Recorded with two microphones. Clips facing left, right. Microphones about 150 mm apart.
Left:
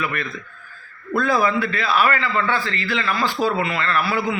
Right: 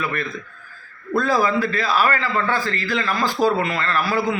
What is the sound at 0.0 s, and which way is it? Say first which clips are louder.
A man's voice: right 1 dB; 35° right (ahead or behind).